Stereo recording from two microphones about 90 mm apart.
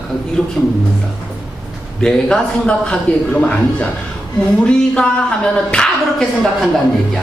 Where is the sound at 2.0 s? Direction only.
10° left (ahead or behind).